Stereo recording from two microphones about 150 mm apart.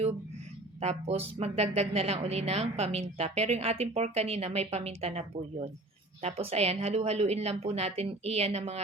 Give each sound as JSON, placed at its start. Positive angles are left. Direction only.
{"t": 0.8, "sound": "speech", "side_deg": -45}